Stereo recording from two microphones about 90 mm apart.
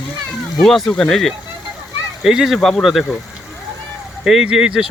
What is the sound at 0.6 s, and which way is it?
Speech, centre (ahead or behind).